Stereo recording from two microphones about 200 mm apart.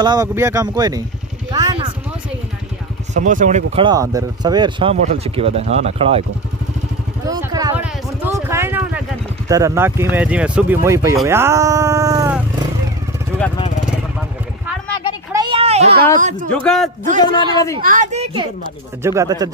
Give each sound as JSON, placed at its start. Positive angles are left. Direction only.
{"t": 0.0, "sound": "speech", "side_deg": -20}
{"t": 1.5, "sound": "vehicle", "side_deg": -20}
{"t": 3.2, "sound": "speech", "side_deg": -40}
{"t": 3.8, "sound": "speech", "side_deg": -15}
{"t": 7.2, "sound": "vehicle", "side_deg": -20}
{"t": 8.5, "sound": "a sound", "side_deg": -10}
{"t": 9.5, "sound": "speech", "side_deg": -15}
{"t": 15.3, "sound": "a sound", "side_deg": -25}
{"t": 16.2, "sound": "speech", "side_deg": -40}
{"t": 16.6, "sound": "a man's voice", "side_deg": 5}
{"t": 17.2, "sound": "a man's voice", "side_deg": 20}
{"t": 17.8, "sound": "speech", "side_deg": -35}
{"t": 19.0, "sound": "speech", "side_deg": -15}